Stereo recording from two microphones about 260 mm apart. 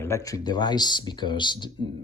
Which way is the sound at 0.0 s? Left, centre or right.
Centre.